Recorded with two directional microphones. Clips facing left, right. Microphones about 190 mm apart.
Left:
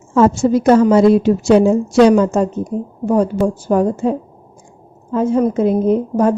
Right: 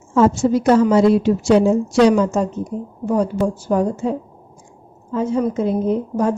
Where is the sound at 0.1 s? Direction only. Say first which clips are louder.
Left 2 dB; 50° left (ahead or behind).